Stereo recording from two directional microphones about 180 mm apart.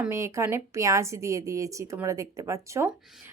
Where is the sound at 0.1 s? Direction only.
15° right (ahead or behind).